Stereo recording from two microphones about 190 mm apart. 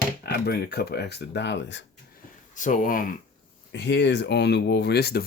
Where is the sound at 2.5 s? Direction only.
40° left (ahead or behind).